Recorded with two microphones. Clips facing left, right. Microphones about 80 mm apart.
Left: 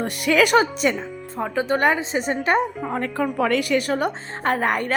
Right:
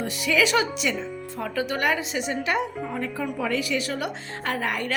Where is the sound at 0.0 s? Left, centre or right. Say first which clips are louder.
Left 4 dB; left.